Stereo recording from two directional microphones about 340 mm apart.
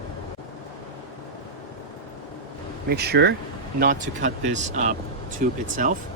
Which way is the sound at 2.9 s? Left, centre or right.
Right.